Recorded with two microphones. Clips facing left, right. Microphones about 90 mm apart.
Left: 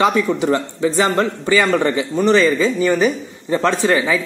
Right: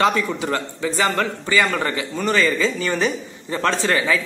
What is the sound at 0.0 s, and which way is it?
A man's voice, 15° left (ahead or behind).